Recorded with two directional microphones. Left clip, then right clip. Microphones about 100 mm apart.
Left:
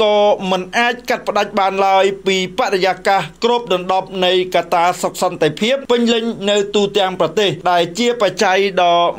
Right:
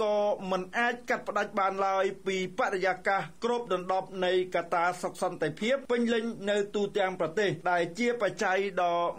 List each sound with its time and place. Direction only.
0.0 s speech: 25° left (ahead or behind)
8.5 s speech: 30° left (ahead or behind)